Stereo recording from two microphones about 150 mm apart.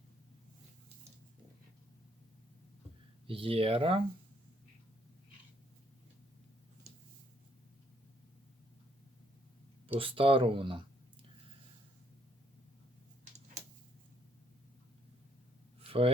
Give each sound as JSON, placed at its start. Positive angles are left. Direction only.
{"t": 3.2, "sound": "speech", "side_deg": -35}
{"t": 10.0, "sound": "speech", "side_deg": -35}
{"t": 15.8, "sound": "a sound", "side_deg": -40}